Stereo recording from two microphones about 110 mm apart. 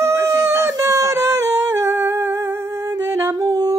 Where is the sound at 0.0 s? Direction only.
25° right (ahead or behind).